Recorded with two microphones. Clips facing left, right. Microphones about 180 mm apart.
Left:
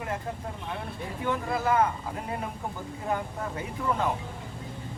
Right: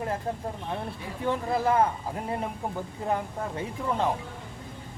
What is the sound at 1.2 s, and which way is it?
Speech, 35° right (ahead or behind).